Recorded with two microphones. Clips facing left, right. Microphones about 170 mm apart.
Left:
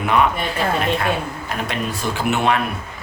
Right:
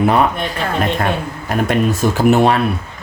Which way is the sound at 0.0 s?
35° right (ahead or behind).